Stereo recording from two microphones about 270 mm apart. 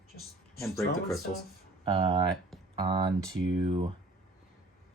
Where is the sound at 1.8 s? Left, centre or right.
Centre.